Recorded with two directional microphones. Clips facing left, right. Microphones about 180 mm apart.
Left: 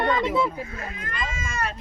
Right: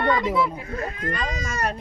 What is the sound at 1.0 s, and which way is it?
Speech, 35° right (ahead or behind).